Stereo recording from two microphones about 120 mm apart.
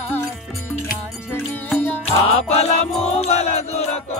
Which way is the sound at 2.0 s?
65° left (ahead or behind).